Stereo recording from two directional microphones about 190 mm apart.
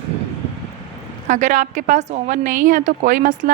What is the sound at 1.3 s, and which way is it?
A woman's voice, 40° right (ahead or behind).